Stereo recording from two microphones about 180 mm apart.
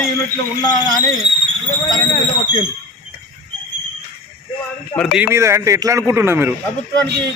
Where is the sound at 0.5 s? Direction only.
20° left (ahead or behind).